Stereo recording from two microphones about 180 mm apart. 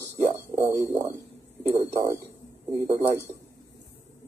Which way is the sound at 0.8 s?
15° right (ahead or behind).